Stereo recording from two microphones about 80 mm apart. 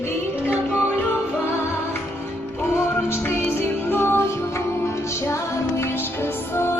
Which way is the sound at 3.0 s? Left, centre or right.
Left.